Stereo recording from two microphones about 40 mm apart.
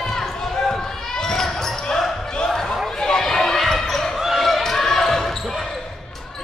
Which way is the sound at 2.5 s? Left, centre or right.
Centre.